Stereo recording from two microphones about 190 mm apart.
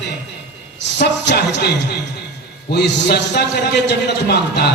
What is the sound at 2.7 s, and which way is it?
A man's voice, 60° left (ahead or behind).